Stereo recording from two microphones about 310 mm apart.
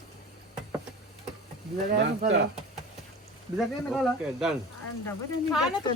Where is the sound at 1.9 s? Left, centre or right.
Right.